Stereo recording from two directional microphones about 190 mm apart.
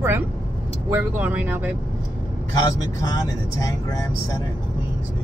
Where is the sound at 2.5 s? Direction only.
20° left (ahead or behind).